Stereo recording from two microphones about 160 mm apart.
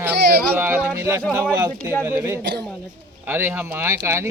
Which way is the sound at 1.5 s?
20° right (ahead or behind).